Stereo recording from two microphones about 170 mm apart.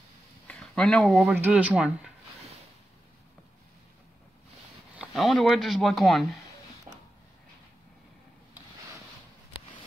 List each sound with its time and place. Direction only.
0.5 s speech: 5° left (ahead or behind)
1.3 s speech: 10° right (ahead or behind)
4.9 s speech: 5° right (ahead or behind)